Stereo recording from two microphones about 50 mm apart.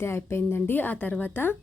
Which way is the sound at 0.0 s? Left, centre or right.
Left.